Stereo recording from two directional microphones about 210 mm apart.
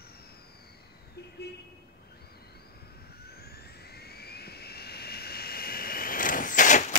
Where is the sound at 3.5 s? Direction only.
50° left (ahead or behind).